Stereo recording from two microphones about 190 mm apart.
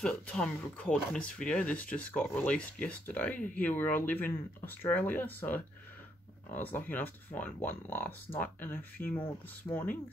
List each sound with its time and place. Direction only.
0.0 s speech: 5° left (ahead or behind)